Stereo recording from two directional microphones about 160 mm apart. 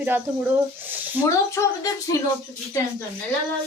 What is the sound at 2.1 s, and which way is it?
Speech, 20° left (ahead or behind).